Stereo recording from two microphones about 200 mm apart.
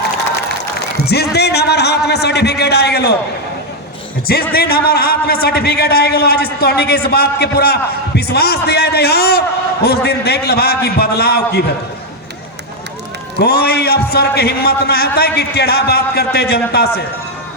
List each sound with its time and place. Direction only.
1.0 s a man's voice: 55° left (ahead or behind)
4.3 s a man's voice: 50° left (ahead or behind)
13.3 s a man's voice: 50° left (ahead or behind)